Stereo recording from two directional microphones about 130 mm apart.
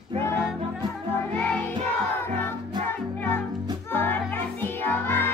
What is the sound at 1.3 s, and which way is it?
Music, 15° left (ahead or behind).